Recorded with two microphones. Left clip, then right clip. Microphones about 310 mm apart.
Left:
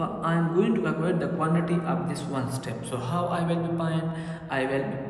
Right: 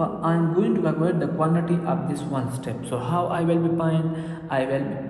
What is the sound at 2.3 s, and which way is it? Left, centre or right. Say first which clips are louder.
A man's voice: right 3 dB; centre.